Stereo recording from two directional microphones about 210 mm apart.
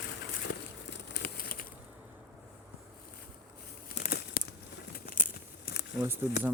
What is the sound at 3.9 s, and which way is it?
Crumpling, 45° left (ahead or behind).